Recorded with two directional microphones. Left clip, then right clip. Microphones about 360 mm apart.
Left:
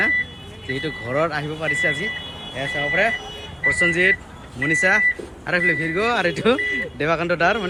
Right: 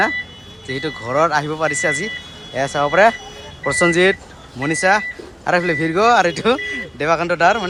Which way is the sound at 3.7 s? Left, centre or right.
Centre.